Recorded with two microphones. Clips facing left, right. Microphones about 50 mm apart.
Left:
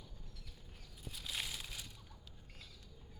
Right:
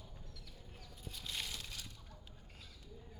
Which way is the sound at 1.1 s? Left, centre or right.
Centre.